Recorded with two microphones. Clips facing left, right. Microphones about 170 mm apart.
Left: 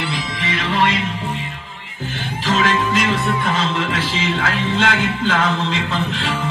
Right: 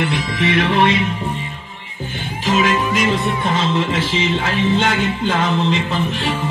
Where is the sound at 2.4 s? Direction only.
15° right (ahead or behind).